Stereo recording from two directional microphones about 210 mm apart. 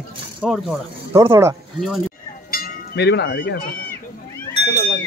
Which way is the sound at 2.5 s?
55° left (ahead or behind).